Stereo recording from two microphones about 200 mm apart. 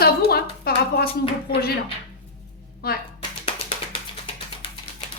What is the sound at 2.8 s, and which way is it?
Speech, 50° left (ahead or behind).